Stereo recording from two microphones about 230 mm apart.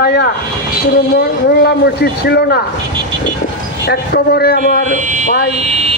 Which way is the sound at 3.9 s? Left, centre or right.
Left.